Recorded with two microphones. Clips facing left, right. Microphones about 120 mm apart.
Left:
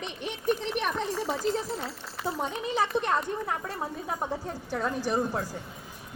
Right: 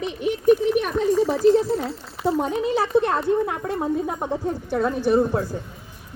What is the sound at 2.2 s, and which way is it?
Speech, 25° right (ahead or behind).